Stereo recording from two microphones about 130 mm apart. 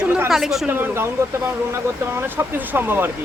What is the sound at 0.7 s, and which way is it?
Speech, 15° right (ahead or behind).